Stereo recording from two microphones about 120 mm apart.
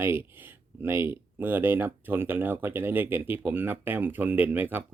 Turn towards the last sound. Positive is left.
turn(degrees=-15)  # may be behind; listen again after turning